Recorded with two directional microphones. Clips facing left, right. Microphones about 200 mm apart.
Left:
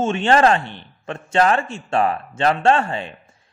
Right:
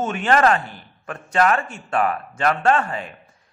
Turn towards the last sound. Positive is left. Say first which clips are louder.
# left 2 dB
turn(degrees=25)  # may be behind; listen again after turning